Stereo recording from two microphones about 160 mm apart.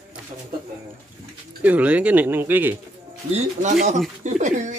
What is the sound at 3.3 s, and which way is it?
Speech, 50° right (ahead or behind).